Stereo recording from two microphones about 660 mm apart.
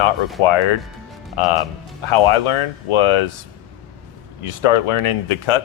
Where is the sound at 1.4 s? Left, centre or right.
Left.